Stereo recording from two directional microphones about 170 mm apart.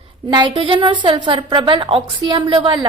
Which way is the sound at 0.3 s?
25° right (ahead or behind).